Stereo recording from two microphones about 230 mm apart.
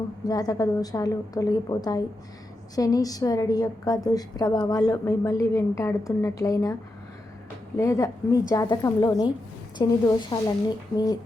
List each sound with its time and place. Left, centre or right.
0.3 s a woman's voice: centre
7.8 s a woman's voice: centre